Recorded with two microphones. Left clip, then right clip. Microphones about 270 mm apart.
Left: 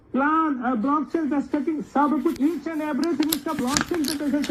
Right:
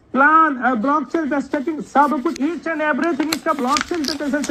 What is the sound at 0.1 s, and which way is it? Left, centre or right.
A man's voice, right.